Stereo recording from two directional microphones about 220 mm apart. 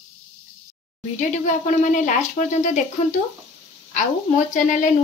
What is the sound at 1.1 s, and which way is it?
Speech, 35° left (ahead or behind).